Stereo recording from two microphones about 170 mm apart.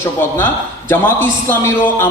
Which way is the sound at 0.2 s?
10° left (ahead or behind).